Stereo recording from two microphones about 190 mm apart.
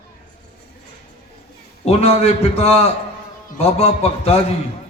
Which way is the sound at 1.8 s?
30° left (ahead or behind).